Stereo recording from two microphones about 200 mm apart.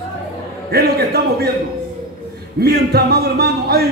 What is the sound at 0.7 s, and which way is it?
Speech, 50° right (ahead or behind).